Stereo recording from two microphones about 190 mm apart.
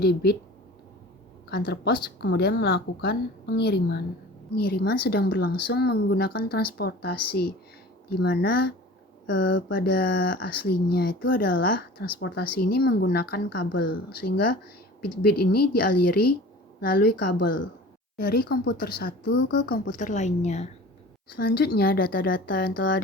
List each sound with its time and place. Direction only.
0.0 s speech: 55° left (ahead or behind)
1.5 s speech: 55° left (ahead or behind)
9.2 s speech: 70° left (ahead or behind)
9.7 s speech: 55° left (ahead or behind)
18.2 s speech: 50° left (ahead or behind); by 20.7 s 35° left (ahead or behind)
21.3 s speech: 55° left (ahead or behind)